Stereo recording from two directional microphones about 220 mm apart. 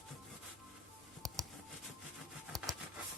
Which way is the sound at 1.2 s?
Centre (ahead or behind).